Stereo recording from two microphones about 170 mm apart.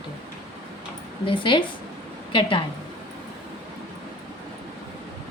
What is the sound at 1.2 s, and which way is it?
Speech, 30° left (ahead or behind).